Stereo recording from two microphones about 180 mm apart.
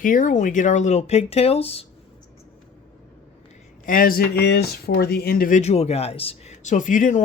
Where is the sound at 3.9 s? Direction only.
50° left (ahead or behind).